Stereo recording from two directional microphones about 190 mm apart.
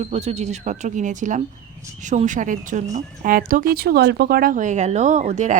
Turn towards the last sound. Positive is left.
turn(degrees=-40)  # may be behind; listen again after turning